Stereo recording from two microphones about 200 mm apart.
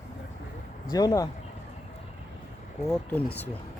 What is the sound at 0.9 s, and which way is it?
Speech, 20° left (ahead or behind).